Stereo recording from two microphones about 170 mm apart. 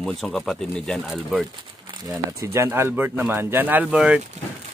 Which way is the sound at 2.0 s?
15° right (ahead or behind).